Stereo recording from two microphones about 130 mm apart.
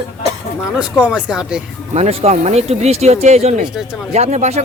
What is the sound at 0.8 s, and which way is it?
Speech, 5° right (ahead or behind).